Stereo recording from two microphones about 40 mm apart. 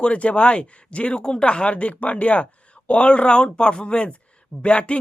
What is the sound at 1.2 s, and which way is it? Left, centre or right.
Speech, left.